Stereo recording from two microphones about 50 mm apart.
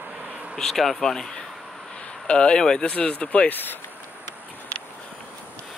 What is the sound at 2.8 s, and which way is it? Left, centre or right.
Speech, left.